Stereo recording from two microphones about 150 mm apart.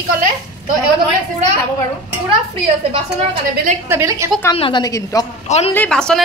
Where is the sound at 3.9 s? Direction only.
15° right (ahead or behind).